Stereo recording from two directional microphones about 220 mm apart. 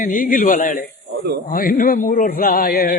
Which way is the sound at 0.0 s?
35° left (ahead or behind).